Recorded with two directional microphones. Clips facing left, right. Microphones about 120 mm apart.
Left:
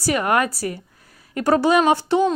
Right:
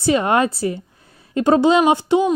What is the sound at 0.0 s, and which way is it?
Speech, 25° right (ahead or behind).